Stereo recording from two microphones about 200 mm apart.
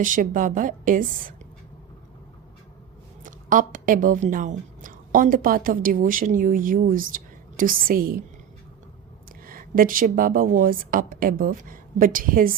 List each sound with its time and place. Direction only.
0.0 s a woman's voice: 40° right (ahead or behind)
3.2 s speech: 40° right (ahead or behind)
9.5 s a woman's voice: 45° right (ahead or behind)